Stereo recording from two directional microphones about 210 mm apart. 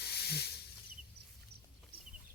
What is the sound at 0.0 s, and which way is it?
Snake, 50° left (ahead or behind).